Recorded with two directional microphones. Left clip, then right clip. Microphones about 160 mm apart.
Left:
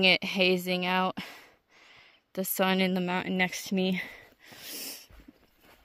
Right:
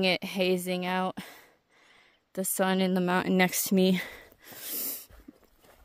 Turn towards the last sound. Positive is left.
turn(degrees=-40)  # may be behind; listen again after turning